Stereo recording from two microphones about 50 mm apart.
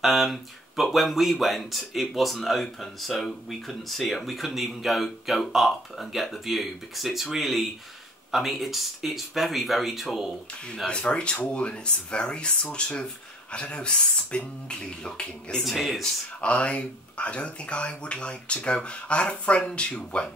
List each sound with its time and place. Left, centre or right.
0.0 s speech: centre
10.9 s speech: left
15.6 s speech: centre
16.3 s speech: left